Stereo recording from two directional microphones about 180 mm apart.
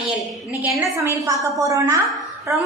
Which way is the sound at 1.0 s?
20° right (ahead or behind).